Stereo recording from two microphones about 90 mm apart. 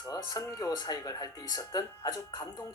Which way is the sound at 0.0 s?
45° left (ahead or behind).